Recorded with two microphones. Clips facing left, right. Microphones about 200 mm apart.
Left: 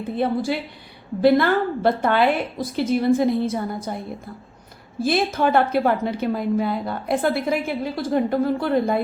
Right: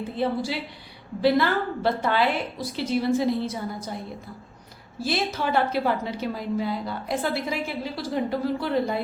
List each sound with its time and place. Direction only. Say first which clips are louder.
0.2 s a woman's voice: left 4 dB; 55° left (ahead or behind)
5.0 s a woman's voice: left 6 dB; 50° left (ahead or behind)